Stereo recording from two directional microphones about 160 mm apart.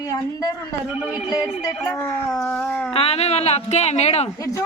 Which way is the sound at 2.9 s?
40° left (ahead or behind).